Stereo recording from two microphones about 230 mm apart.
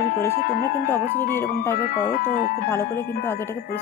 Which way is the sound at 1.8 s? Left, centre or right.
Left.